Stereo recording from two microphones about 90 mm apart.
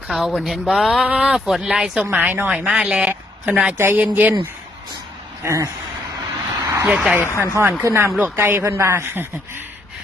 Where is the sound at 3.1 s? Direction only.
20° right (ahead or behind).